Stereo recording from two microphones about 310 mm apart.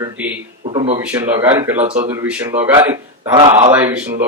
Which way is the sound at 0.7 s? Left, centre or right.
Centre.